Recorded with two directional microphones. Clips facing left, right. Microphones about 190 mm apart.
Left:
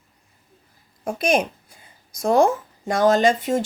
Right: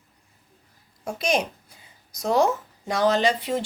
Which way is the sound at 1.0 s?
55° left (ahead or behind).